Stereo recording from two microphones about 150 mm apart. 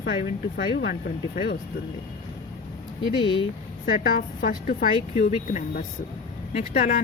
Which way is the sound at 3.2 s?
30° left (ahead or behind).